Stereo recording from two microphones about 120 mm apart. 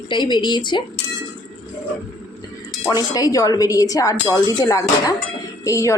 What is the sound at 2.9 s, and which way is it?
A woman's voice, 30° left (ahead or behind).